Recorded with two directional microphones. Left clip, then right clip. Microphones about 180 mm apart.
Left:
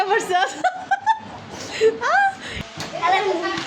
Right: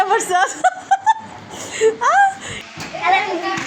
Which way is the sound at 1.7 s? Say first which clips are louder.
Right 4 dB; centre (ahead or behind).